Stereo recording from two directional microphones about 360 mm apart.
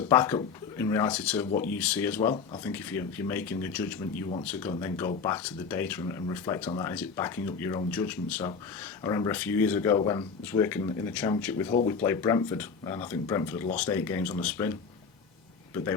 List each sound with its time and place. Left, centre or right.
0.1 s speech: centre